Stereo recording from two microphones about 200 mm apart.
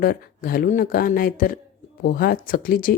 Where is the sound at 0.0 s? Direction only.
45° left (ahead or behind).